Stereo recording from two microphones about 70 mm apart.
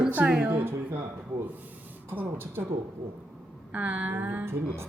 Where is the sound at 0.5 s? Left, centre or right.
Right.